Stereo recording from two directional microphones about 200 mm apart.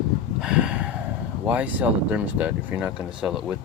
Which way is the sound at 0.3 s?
5° right (ahead or behind).